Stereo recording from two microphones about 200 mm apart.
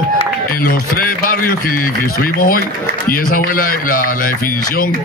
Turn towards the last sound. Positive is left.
turn(degrees=45)  # may be behind; listen again after turning